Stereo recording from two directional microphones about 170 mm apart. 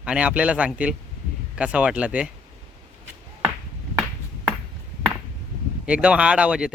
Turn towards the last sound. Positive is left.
turn(degrees=-5)  # may be behind; listen again after turning